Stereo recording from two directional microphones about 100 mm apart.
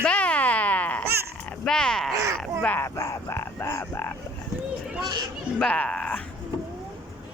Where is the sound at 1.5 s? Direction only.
5° left (ahead or behind).